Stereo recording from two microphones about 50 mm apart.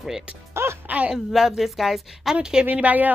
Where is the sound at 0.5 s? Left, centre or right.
Right.